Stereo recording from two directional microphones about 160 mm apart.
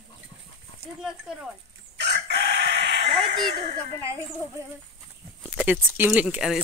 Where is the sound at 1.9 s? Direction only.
90° right.